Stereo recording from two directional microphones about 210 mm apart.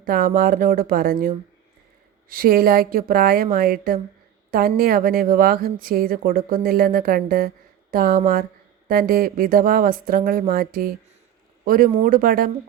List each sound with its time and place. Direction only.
0.0 s speech: 45° right (ahead or behind)